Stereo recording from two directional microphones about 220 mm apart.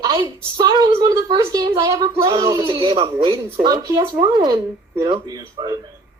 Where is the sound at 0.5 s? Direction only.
20° right (ahead or behind).